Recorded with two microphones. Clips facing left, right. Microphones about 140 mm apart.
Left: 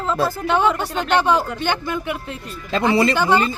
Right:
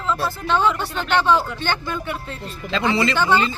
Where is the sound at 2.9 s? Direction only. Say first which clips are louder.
Left 4 dB; 50° left (ahead or behind).